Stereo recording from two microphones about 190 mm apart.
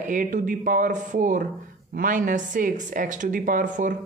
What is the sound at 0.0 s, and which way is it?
Speech, 40° right (ahead or behind).